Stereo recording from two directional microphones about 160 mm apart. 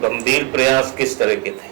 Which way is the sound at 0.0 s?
15° right (ahead or behind).